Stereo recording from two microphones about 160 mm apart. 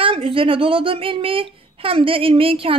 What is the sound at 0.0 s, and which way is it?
Speech, 35° right (ahead or behind).